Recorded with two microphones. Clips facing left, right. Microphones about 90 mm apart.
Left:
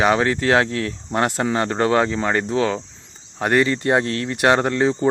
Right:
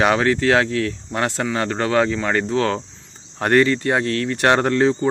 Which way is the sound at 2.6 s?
5° left (ahead or behind).